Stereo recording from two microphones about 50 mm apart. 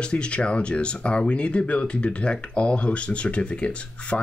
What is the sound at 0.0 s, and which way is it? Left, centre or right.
Speech, centre.